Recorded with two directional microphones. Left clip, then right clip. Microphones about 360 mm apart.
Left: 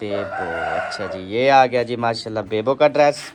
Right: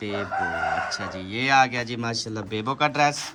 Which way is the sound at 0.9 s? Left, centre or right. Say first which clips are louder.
Left 4 dB; centre.